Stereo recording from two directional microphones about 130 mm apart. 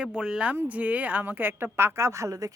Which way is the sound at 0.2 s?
10° right (ahead or behind).